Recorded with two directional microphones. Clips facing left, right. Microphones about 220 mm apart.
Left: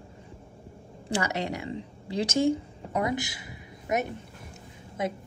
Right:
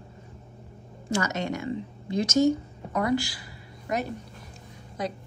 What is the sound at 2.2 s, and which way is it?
A woman's voice, 30° left (ahead or behind).